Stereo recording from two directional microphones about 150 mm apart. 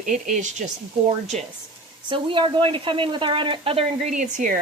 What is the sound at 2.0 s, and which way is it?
A woman's voice, 30° right (ahead or behind).